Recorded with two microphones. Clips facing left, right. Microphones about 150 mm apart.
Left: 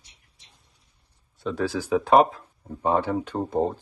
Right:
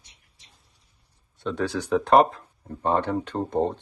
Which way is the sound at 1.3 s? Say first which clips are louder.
Even; centre (ahead or behind).